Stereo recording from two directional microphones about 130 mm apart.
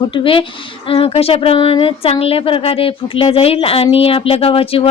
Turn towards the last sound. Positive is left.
turn(degrees=45)  # may be behind; listen again after turning